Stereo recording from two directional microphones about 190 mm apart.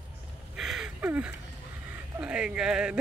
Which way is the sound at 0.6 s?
Centre (ahead or behind).